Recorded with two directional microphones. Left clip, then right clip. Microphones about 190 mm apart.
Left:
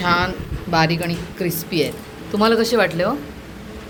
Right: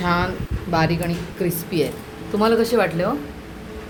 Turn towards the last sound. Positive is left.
turn(degrees=0)  # may be behind; listen again after turning